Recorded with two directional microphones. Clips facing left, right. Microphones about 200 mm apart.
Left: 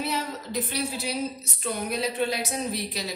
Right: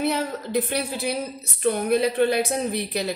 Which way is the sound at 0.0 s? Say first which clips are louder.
Right 6 dB; 55° right (ahead or behind).